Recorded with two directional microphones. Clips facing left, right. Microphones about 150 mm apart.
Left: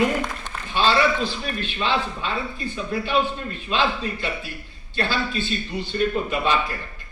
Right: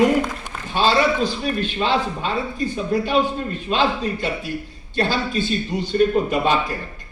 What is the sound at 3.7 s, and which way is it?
A man's voice, 40° right (ahead or behind).